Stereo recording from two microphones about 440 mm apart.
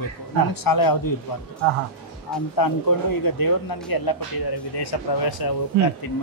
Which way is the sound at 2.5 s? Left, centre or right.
Left.